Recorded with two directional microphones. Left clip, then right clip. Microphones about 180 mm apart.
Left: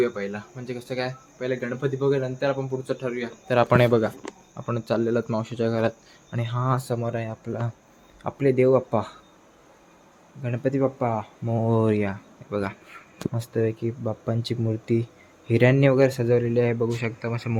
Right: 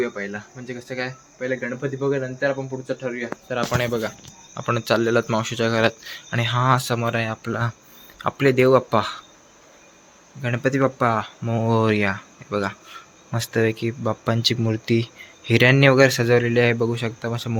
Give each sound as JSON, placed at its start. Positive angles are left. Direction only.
{"t": 0.0, "sound": "speech", "side_deg": 5}
{"t": 3.5, "sound": "speech", "side_deg": 55}
{"t": 4.5, "sound": "speech", "side_deg": 0}
{"t": 10.4, "sound": "speech", "side_deg": -5}